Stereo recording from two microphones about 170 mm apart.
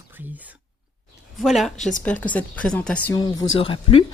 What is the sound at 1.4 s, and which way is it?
A woman's voice, centre (ahead or behind).